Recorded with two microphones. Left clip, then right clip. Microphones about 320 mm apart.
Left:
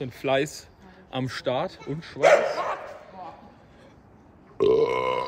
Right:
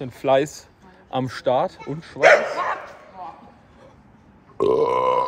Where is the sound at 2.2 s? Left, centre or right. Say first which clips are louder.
Right 4 dB; right.